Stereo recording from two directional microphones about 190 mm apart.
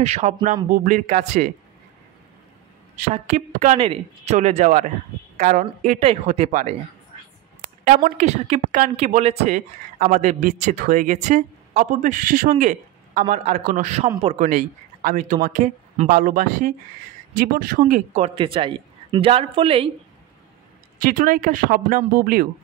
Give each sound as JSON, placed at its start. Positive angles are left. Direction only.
{"t": 0.0, "sound": "speech", "side_deg": -35}
{"t": 3.0, "sound": "speech", "side_deg": -35}
{"t": 7.8, "sound": "speech", "side_deg": -45}
{"t": 21.0, "sound": "speech", "side_deg": -45}